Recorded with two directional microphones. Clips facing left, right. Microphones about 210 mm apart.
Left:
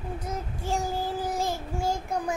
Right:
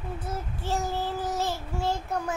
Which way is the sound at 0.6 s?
10° left (ahead or behind).